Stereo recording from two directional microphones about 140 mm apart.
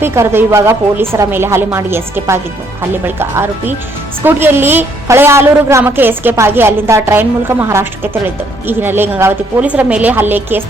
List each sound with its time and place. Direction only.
0.0 s a woman's voice: 15° right (ahead or behind)